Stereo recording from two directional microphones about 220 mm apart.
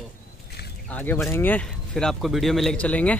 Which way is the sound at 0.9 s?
5° left (ahead or behind).